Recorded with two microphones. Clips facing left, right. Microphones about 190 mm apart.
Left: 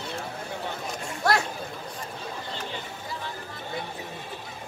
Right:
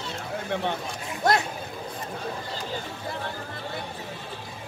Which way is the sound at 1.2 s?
20° right (ahead or behind).